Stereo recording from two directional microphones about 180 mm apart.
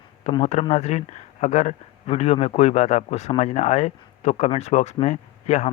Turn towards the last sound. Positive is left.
turn(degrees=40)  # may be behind; listen again after turning